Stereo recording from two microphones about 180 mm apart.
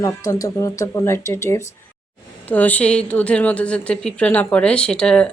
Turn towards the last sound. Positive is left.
turn(degrees=5)  # may be behind; listen again after turning